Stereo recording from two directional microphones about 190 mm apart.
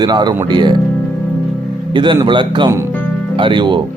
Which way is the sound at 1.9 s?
25° right (ahead or behind).